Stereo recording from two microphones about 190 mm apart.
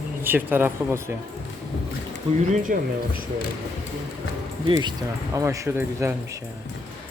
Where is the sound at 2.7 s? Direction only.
45° right (ahead or behind).